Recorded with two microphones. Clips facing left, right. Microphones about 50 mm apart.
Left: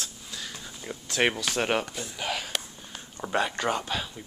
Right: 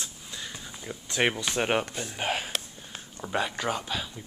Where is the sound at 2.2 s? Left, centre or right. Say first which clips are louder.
Right 2 dB; right.